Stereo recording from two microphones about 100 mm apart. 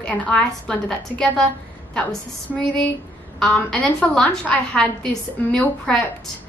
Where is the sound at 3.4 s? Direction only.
5° left (ahead or behind).